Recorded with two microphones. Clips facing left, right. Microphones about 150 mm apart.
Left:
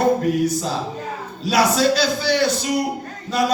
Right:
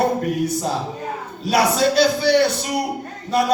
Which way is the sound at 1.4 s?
55° right (ahead or behind).